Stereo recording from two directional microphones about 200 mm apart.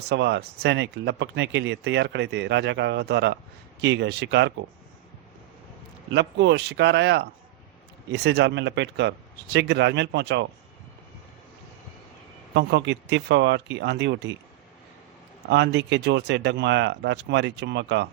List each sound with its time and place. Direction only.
0.1 s speech: 60° right (ahead or behind)
6.1 s speech: 60° right (ahead or behind)
12.5 s speech: 65° right (ahead or behind)
15.4 s speech: 60° right (ahead or behind)